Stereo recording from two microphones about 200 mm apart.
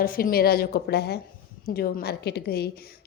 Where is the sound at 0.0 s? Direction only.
45° left (ahead or behind).